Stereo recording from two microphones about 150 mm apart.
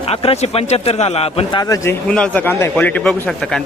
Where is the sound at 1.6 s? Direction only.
20° left (ahead or behind).